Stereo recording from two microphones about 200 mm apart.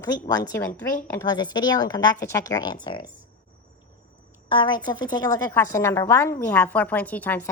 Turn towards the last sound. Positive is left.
turn(degrees=10)  # may be behind; listen again after turning